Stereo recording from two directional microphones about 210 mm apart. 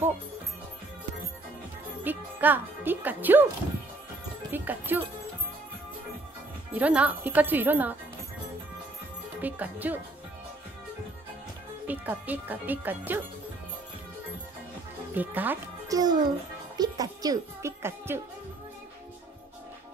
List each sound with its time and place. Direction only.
2.0 s speech: 10° right (ahead or behind)
4.5 s speech: 10° right (ahead or behind)
6.7 s speech: 5° right (ahead or behind)
9.4 s speech: 10° right (ahead or behind)
11.9 s speech: 10° right (ahead or behind)
15.1 s speech: 10° right (ahead or behind)